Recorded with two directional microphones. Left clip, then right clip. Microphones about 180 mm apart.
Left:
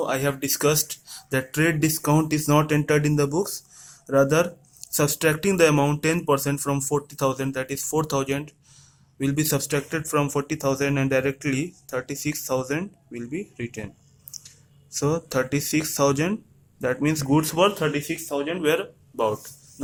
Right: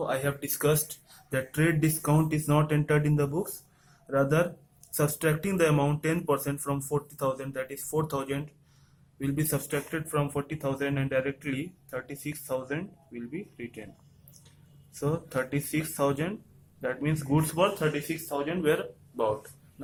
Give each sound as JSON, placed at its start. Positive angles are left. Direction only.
{"t": 0.0, "sound": "speech", "side_deg": 35}
{"t": 14.9, "sound": "speech", "side_deg": 50}